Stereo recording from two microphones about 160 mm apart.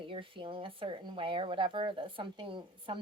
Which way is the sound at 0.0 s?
30° right (ahead or behind).